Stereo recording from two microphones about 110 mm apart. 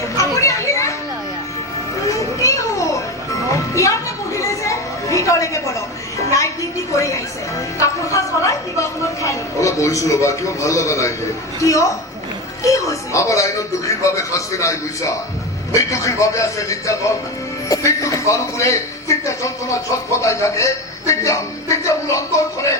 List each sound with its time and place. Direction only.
0.2 s children playing: 30° left (ahead or behind)
2.0 s children playing: 30° left (ahead or behind)
3.5 s chatter: 30° left (ahead or behind)
6.1 s music: 30° left (ahead or behind)
6.9 s a sound: 30° left (ahead or behind)
7.8 s speech: 30° left (ahead or behind)